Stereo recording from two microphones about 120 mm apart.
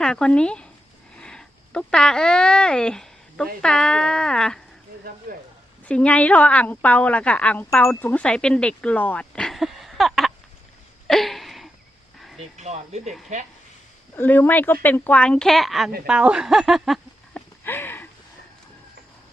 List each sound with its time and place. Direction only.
0.0 s speech: 10° left (ahead or behind)
5.8 s a woman's voice: 10° left (ahead or behind)
11.1 s a sound: centre (ahead or behind)
12.4 s speech: 70° right (ahead or behind)
14.2 s a woman's voice: 15° left (ahead or behind); by 17.4 s centre (ahead or behind)
17.6 s a sound: 20° left (ahead or behind)